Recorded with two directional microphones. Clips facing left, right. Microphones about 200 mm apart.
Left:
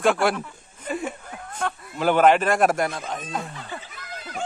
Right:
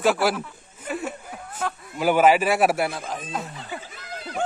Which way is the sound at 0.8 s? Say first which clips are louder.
Left 1 dB; 5° right (ahead or behind).